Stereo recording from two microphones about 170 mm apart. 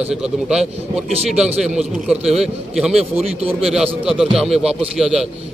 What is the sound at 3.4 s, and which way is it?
Speech, 35° right (ahead or behind).